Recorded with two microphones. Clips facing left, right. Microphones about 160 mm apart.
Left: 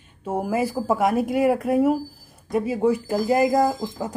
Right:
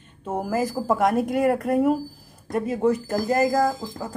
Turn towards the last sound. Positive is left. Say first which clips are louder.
# left 2 dB
turn(degrees=15)  # may be behind; listen again after turning